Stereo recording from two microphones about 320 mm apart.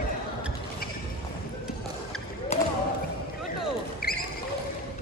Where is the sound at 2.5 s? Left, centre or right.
Left.